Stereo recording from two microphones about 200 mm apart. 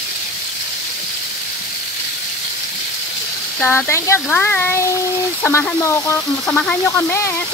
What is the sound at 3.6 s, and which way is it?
Speech, 15° left (ahead or behind).